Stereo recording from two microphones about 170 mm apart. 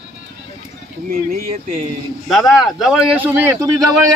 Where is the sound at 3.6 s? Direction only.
20° right (ahead or behind).